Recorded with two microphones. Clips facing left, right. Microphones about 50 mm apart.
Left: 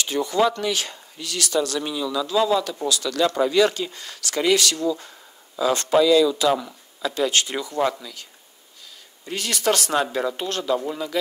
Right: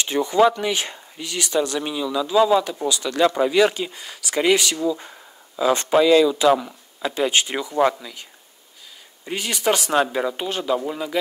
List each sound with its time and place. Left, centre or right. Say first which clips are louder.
0.0 s speech: right 3 dB; right